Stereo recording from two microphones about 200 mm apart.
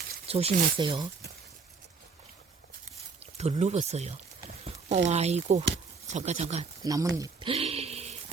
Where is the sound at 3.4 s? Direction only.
30° right (ahead or behind).